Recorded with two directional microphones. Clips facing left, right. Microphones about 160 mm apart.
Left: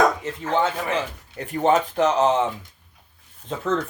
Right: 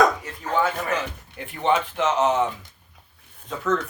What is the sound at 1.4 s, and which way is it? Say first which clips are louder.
Speech: left 3 dB; 40° left (ahead or behind).